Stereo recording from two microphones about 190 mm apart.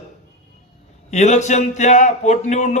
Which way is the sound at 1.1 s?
40° left (ahead or behind).